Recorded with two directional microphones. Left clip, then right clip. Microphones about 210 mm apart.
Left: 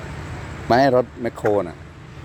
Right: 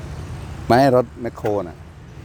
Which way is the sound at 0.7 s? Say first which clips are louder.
Right 1 dB; 25° right (ahead or behind).